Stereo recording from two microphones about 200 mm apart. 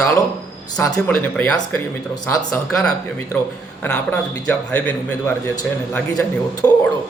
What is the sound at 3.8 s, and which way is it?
A man's voice, 5° left (ahead or behind).